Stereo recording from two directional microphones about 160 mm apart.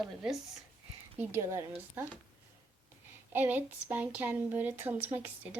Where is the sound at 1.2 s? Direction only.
15° right (ahead or behind).